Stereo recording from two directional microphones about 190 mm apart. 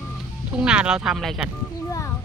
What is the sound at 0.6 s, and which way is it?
Speech, 5° right (ahead or behind).